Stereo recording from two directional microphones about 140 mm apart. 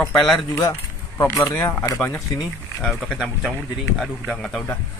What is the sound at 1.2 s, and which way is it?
Speech, 20° left (ahead or behind).